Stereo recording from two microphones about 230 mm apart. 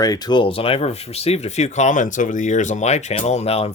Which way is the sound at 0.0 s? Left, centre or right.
Centre.